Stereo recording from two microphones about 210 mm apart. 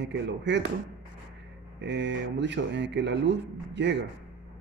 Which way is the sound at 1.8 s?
55° right (ahead or behind).